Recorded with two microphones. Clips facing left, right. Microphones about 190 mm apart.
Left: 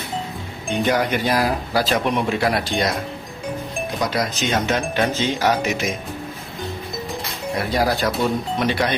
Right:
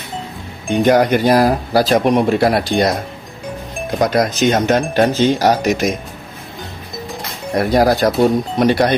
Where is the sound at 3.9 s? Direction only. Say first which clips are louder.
Right 9 dB; 50° right (ahead or behind).